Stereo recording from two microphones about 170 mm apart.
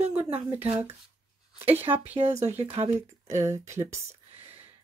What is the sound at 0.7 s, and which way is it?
Speech, 40° right (ahead or behind).